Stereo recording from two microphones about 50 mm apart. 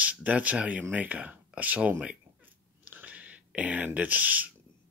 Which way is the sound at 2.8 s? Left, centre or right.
Right.